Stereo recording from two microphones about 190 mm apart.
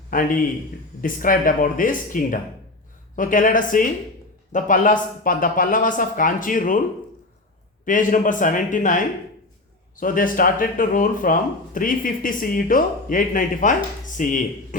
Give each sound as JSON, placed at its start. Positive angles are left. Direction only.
{"t": 0.1, "sound": "speech", "side_deg": 45}
{"t": 7.9, "sound": "speech", "side_deg": 45}